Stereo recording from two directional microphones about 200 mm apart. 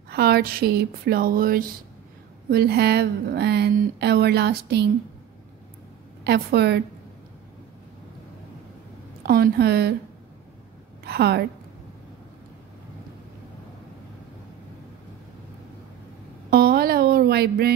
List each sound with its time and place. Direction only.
0.1 s speech: 50° right (ahead or behind)
6.2 s speech: 55° right (ahead or behind)
9.2 s speech: 50° right (ahead or behind)
11.1 s a woman's voice: 55° right (ahead or behind)
16.4 s a sound: 50° right (ahead or behind)